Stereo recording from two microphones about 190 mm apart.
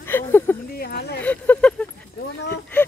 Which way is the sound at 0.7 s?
55° left (ahead or behind).